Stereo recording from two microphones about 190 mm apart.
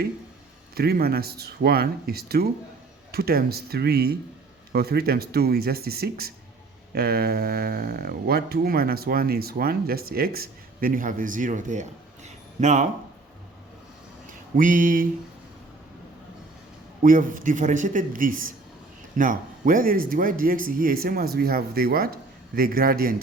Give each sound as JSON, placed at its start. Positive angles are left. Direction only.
{"t": 0.8, "sound": "speech", "side_deg": -55}
{"t": 14.5, "sound": "speech", "side_deg": -45}
{"t": 17.0, "sound": "speech", "side_deg": -45}